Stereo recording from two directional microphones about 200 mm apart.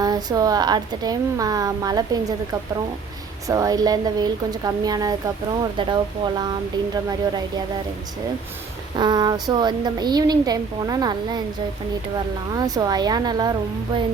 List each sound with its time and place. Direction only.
0.0 s a woman's voice: 20° right (ahead or behind)
3.5 s a woman's voice: 15° right (ahead or behind)
9.0 s a woman's voice: 20° right (ahead or behind)
12.5 s a woman's voice: 20° right (ahead or behind)